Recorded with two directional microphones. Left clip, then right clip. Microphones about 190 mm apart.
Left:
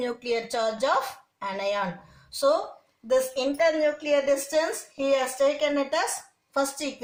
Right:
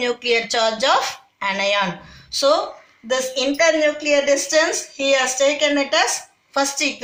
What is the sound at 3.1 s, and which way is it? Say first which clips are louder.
A woman's voice: right 4 dB; 50° left (ahead or behind).